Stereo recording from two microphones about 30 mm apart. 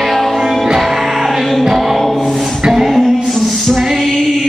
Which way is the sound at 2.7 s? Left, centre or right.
Centre.